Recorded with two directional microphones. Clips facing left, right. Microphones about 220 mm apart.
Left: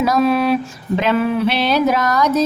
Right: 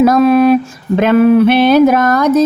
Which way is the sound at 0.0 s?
50° right (ahead or behind).